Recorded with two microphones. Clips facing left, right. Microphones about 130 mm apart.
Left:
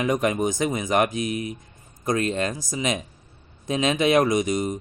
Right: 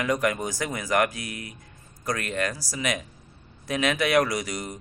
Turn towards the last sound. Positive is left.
turn(degrees=20)  # may be behind; listen again after turning